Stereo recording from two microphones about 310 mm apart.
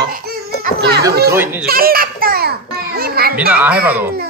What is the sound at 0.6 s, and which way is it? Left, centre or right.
Children playing, right.